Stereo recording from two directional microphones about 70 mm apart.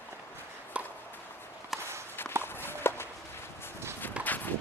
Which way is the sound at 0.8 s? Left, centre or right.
Centre.